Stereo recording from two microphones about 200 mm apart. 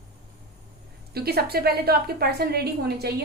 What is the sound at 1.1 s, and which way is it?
A woman's voice, 50° right (ahead or behind).